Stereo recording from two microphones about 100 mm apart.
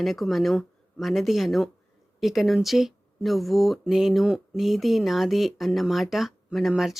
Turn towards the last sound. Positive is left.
turn(degrees=-5)  # may be behind; listen again after turning